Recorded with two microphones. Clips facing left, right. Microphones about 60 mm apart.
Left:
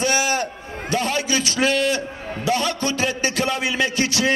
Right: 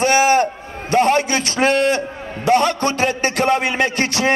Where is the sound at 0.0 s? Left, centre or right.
Right.